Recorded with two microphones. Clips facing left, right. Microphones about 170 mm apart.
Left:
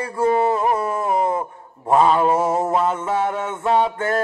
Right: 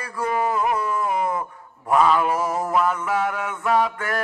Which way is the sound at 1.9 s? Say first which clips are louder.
Left 3 dB; 30° left (ahead or behind).